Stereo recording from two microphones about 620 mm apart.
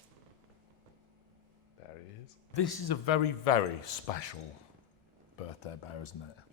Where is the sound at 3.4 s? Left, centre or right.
Left.